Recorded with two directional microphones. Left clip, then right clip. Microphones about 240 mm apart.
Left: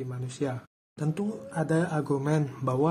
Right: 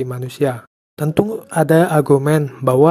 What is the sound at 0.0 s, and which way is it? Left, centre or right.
Speech, right.